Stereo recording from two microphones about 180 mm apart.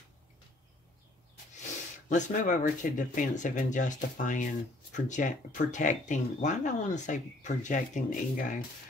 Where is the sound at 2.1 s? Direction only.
45° left (ahead or behind).